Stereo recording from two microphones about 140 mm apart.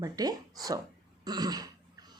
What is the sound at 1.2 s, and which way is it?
Throat clearing, 30° right (ahead or behind).